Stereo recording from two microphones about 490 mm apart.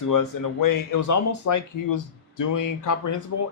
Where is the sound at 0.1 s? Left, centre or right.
Left.